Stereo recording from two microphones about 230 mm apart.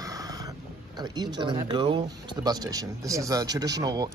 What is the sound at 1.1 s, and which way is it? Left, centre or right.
Speech, centre.